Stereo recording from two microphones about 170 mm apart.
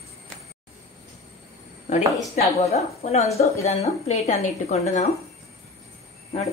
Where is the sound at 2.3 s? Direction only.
40° left (ahead or behind).